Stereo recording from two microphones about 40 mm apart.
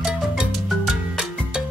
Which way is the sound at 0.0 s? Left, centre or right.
Centre.